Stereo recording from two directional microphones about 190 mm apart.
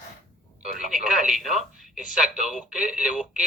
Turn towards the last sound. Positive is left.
turn(degrees=-5)  # may be behind; listen again after turning